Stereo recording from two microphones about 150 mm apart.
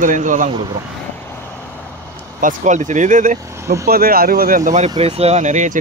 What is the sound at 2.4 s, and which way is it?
Speech, 55° right (ahead or behind).